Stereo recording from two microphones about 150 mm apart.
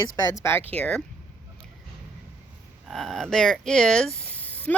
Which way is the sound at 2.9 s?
Centre (ahead or behind).